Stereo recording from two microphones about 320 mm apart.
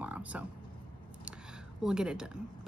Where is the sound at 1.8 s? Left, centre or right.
Centre.